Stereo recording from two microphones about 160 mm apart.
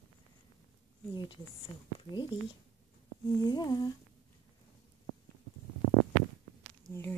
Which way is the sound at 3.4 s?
25° left (ahead or behind).